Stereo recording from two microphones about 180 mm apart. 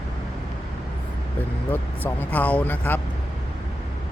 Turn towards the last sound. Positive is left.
turn(degrees=10)  # may be behind; listen again after turning